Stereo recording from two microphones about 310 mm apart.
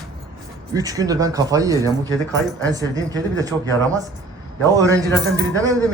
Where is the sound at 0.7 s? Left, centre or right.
Centre.